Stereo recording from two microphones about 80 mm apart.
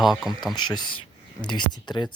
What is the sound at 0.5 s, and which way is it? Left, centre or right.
Speech, left.